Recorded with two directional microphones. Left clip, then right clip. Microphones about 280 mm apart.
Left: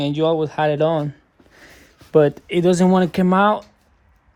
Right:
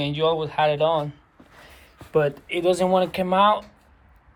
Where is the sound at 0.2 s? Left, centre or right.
Left.